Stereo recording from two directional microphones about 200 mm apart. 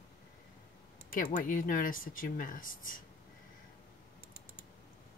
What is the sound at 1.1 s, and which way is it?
Speech, 45° left (ahead or behind).